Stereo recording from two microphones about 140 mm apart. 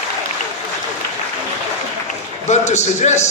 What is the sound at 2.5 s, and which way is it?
Speech, 55° left (ahead or behind).